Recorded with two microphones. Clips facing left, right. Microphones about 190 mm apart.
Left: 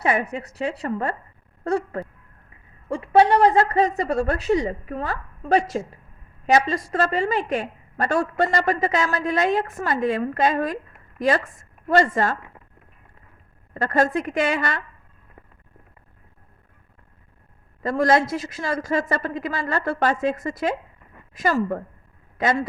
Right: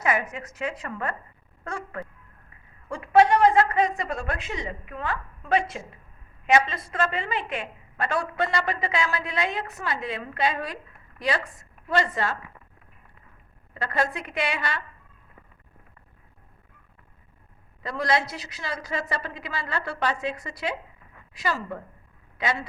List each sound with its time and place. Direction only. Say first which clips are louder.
0.0 s a woman's voice: left 4 dB; 35° left (ahead or behind)
11.9 s a woman's voice: left 6 dB; 45° left (ahead or behind)
13.7 s a woman's voice: left 7 dB; 45° left (ahead or behind)
17.8 s a woman's voice: left 7 dB; 50° left (ahead or behind)